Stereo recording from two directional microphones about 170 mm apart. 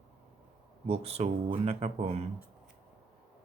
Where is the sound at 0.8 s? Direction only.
35° right (ahead or behind).